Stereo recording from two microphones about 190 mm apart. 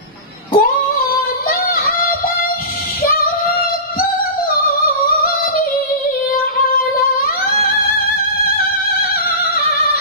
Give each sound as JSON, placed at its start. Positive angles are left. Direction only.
{"t": 0.5, "sound": "female singing", "side_deg": 50}
{"t": 4.5, "sound": "music", "side_deg": 50}